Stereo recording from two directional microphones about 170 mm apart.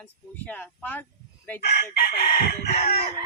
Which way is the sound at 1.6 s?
65° left (ahead or behind).